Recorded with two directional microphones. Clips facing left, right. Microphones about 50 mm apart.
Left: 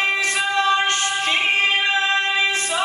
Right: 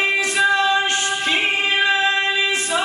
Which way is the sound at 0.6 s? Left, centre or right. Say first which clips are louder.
Even; left.